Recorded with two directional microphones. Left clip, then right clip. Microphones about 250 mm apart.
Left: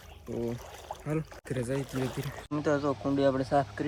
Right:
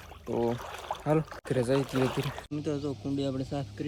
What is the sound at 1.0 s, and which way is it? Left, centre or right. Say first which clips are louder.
Speech: right 7 dB; centre.